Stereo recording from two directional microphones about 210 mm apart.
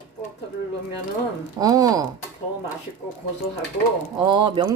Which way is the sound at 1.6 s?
15° right (ahead or behind).